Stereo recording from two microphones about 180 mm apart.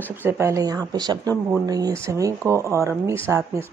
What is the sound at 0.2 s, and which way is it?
A woman's voice, 15° right (ahead or behind).